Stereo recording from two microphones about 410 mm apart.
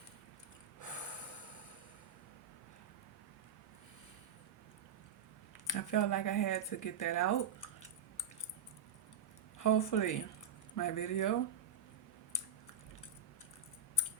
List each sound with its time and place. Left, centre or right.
5.6 s speech: left
9.6 s speech: left